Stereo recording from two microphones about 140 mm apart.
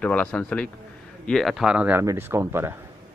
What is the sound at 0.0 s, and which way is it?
A man's voice, 10° left (ahead or behind).